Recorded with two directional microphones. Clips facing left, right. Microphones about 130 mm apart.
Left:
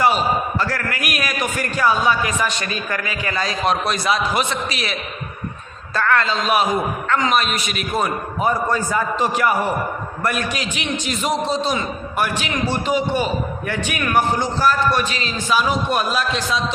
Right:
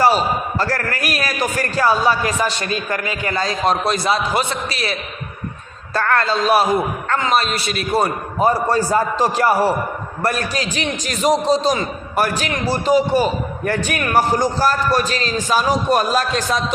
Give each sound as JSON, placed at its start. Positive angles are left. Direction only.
{"t": 0.6, "sound": "a man's voice", "side_deg": -40}